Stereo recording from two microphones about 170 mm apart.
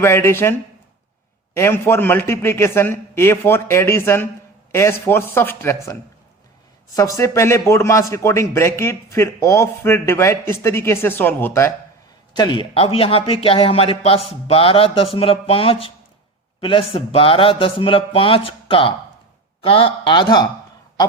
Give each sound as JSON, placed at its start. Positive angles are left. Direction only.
{"t": 0.0, "sound": "a man's voice", "side_deg": 15}
{"t": 1.5, "sound": "a man's voice", "side_deg": 15}
{"t": 12.4, "sound": "a man's voice", "side_deg": 30}